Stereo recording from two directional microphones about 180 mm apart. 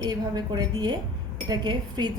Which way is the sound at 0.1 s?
25° right (ahead or behind).